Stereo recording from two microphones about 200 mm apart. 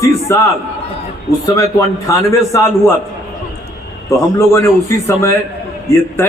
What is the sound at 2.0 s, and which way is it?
Speech, 15° left (ahead or behind).